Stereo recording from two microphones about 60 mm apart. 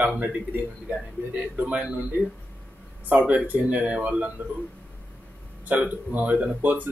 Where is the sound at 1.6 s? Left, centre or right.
Right.